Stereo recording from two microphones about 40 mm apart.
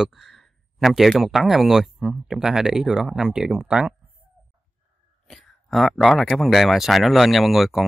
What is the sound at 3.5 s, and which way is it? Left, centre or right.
Speech, right.